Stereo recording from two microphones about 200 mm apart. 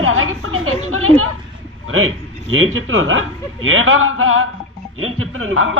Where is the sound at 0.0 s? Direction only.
90° right.